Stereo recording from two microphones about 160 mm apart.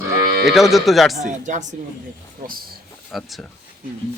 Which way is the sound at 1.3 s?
50° right (ahead or behind).